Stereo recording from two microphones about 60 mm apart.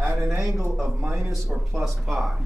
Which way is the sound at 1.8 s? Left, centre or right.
Centre.